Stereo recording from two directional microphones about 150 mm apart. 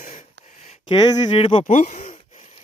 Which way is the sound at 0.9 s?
35° left (ahead or behind).